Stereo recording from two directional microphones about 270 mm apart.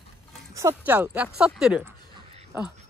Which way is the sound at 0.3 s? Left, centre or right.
Centre.